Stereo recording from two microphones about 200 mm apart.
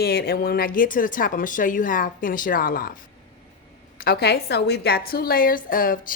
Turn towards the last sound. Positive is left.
turn(degrees=45)  # may be behind; listen again after turning